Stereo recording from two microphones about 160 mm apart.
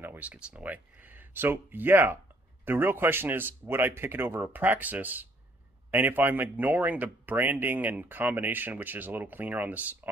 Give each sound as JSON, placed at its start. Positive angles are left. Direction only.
{"t": 0.0, "sound": "speech", "side_deg": -10}